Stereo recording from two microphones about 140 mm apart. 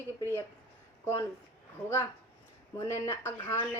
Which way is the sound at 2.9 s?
20° left (ahead or behind).